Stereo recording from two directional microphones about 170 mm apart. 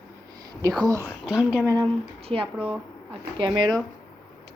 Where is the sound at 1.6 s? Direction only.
20° right (ahead or behind).